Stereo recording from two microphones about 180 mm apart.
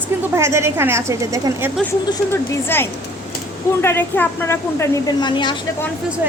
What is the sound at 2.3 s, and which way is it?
A woman's voice, 10° left (ahead or behind).